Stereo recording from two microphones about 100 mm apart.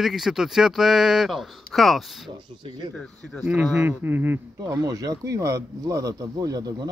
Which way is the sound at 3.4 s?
15° right (ahead or behind).